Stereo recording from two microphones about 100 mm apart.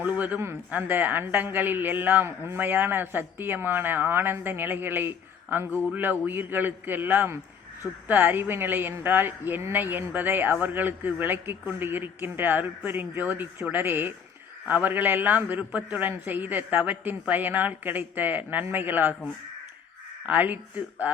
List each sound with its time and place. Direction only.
0.0 s a man's voice: 15° right (ahead or behind)
20.2 s speech: 15° right (ahead or behind)